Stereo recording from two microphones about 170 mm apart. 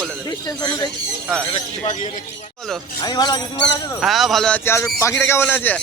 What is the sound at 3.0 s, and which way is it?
Speech, 25° left (ahead or behind).